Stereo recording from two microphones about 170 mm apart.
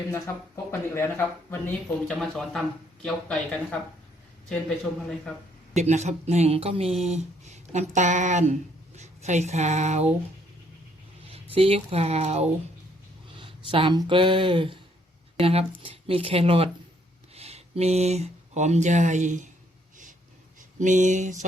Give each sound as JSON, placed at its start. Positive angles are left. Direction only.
{"t": 0.1, "sound": "speech", "side_deg": 15}
{"t": 5.7, "sound": "a woman's voice", "side_deg": -40}
{"t": 11.5, "sound": "speech", "side_deg": -35}
{"t": 20.6, "sound": "a sound", "side_deg": -45}